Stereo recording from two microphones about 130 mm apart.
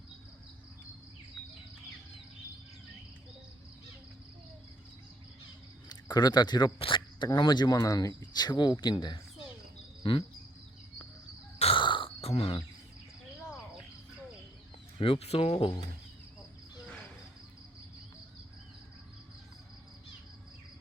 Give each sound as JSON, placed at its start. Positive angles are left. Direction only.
{"t": 5.9, "sound": "speech", "side_deg": 30}
{"t": 10.0, "sound": "insect", "side_deg": 40}
{"t": 11.6, "sound": "a sound", "side_deg": 40}
{"t": 14.9, "sound": "speech", "side_deg": 45}